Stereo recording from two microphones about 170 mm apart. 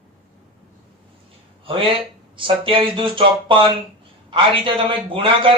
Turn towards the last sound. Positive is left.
turn(degrees=-30)  # may be behind; listen again after turning